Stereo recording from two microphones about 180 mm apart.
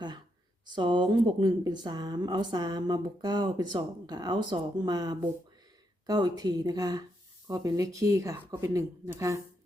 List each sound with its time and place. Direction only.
0.6 s speech: 25° right (ahead or behind)